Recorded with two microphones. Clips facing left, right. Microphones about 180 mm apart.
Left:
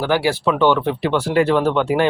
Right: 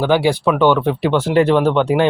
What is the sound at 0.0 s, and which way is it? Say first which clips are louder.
Speech: right 3 dB; 15° right (ahead or behind).